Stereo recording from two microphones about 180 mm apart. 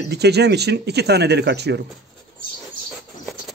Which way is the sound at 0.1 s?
65° right (ahead or behind).